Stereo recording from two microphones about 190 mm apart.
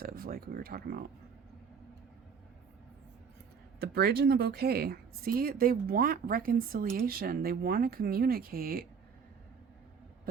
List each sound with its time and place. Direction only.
0.0 s speech: 50° right (ahead or behind)
3.8 s speech: 55° right (ahead or behind)